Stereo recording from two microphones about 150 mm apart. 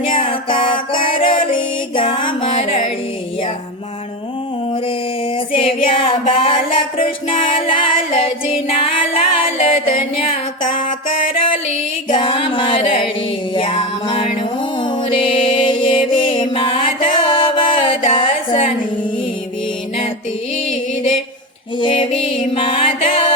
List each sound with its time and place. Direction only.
0.0 s music: 35° left (ahead or behind)
5.5 s a sound: 35° left (ahead or behind)
7.3 s music: 35° left (ahead or behind)
10.8 s music: 35° left (ahead or behind)
21.8 s music: 35° left (ahead or behind)